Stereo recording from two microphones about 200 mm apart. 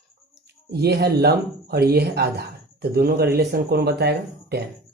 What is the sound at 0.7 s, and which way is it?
Speech, 55° right (ahead or behind).